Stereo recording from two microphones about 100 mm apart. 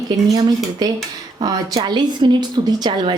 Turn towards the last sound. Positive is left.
turn(degrees=-50)  # may be behind; listen again after turning